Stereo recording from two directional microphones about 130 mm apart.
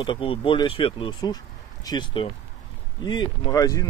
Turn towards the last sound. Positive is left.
turn(degrees=30)  # may be behind; listen again after turning